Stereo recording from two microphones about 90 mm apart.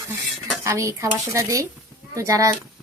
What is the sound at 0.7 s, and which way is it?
Speech, 35° right (ahead or behind).